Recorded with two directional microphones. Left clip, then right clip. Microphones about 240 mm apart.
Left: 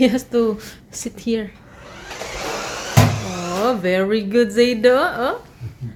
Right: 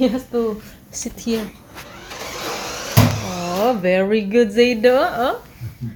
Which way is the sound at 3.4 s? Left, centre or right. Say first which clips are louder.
Right 1 dB; centre.